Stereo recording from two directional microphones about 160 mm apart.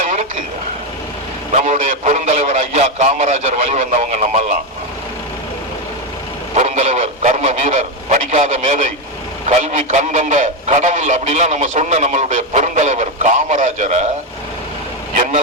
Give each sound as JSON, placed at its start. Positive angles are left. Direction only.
{"t": 1.5, "sound": "speech", "side_deg": -50}
{"t": 6.5, "sound": "speech", "side_deg": -45}